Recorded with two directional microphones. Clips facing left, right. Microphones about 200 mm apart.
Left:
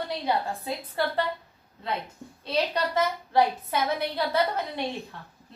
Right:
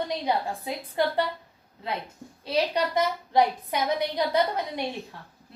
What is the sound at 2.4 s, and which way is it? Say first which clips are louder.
A woman's voice: right 1 dB; 10° right (ahead or behind).